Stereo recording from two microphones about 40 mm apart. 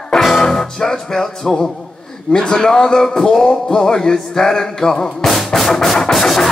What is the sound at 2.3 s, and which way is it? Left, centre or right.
Music, centre.